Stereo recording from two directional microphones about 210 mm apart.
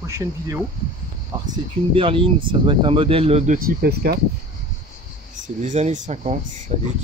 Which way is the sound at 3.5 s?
45° right (ahead or behind).